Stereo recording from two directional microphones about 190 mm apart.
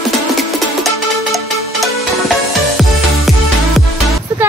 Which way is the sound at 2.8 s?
Centre (ahead or behind).